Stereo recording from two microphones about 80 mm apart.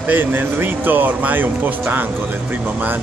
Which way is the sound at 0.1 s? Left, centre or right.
Right.